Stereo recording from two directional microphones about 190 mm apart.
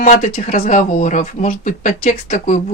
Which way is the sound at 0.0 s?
45° left (ahead or behind).